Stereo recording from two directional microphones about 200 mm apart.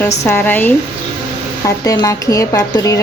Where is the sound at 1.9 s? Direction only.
15° left (ahead or behind).